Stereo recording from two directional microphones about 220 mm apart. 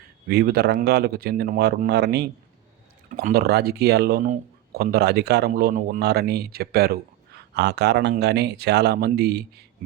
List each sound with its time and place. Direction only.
0.3 s speech: 45° right (ahead or behind)